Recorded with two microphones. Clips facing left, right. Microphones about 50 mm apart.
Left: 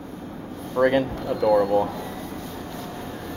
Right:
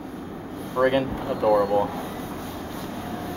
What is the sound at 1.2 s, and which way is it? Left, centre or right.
Speech, right.